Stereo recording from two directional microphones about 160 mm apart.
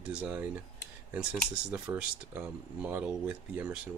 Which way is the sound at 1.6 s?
10° right (ahead or behind).